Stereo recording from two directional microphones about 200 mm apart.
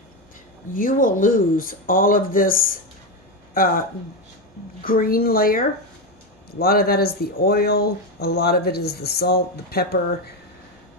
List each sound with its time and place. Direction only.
0.7 s speech: 45° left (ahead or behind)
4.8 s speech: 45° left (ahead or behind)